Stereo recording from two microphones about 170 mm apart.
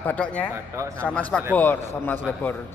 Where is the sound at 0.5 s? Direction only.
15° right (ahead or behind).